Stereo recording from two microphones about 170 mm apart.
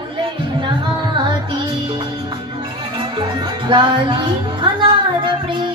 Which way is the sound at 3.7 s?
30° right (ahead or behind).